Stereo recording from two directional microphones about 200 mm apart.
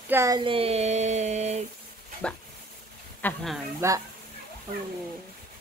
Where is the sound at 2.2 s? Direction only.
5° left (ahead or behind).